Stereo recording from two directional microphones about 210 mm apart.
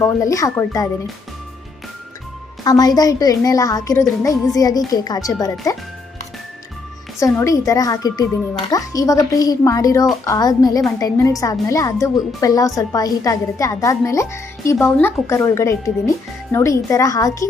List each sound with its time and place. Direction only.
0.0 s a woman's voice: 15° left (ahead or behind)
2.6 s a woman's voice: 20° left (ahead or behind)
7.2 s a woman's voice: 15° left (ahead or behind)